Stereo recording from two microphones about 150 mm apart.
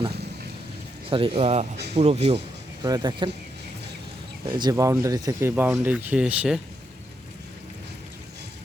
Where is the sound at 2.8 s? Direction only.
25° right (ahead or behind).